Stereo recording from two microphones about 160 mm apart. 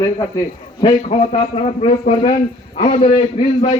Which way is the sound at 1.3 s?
40° left (ahead or behind).